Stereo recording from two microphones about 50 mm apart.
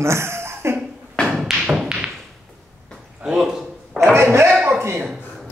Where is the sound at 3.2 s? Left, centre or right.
Centre.